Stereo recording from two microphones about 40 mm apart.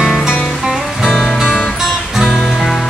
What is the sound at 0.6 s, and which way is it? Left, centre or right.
Music, centre.